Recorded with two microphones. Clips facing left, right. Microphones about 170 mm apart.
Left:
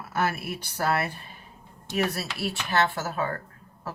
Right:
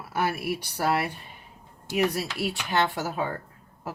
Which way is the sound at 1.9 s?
15° right (ahead or behind).